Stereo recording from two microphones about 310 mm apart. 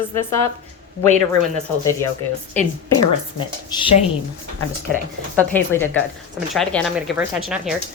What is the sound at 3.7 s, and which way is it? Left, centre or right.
Speech, centre.